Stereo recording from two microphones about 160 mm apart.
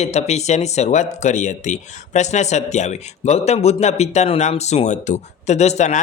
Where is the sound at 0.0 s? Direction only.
45° left (ahead or behind).